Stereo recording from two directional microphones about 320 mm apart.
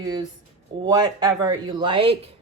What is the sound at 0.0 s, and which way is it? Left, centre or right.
Speech, centre.